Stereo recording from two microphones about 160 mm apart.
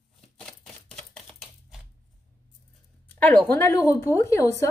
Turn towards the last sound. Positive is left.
turn(degrees=20)  # may be behind; listen again after turning